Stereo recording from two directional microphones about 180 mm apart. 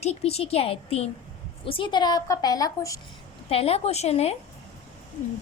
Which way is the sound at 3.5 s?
35° left (ahead or behind).